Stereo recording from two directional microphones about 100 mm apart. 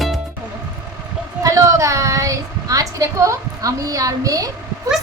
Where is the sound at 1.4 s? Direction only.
30° right (ahead or behind).